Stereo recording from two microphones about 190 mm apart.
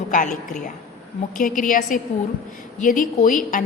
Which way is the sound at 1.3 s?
45° left (ahead or behind).